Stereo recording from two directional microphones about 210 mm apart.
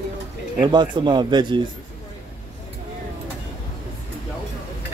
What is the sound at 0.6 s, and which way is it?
Speech, 20° right (ahead or behind).